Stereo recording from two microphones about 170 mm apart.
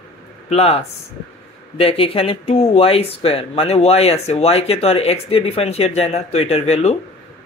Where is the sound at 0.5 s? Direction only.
35° left (ahead or behind).